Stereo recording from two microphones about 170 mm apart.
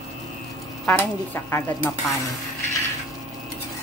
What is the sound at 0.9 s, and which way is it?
Speech, 15° left (ahead or behind).